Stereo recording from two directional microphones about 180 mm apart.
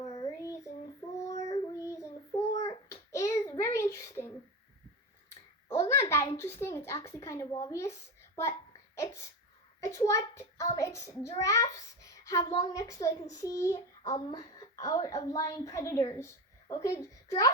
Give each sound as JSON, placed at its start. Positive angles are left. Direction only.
{"t": 0.1, "sound": "child singing", "side_deg": 20}
{"t": 5.6, "sound": "speech", "side_deg": 15}
{"t": 9.8, "sound": "a child's voice", "side_deg": 15}